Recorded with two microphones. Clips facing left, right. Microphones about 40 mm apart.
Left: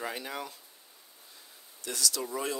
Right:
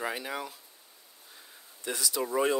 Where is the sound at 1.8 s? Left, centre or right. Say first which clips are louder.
Right 2 dB; centre.